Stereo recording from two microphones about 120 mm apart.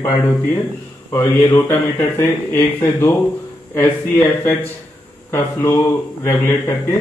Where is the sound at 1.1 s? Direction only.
25° left (ahead or behind).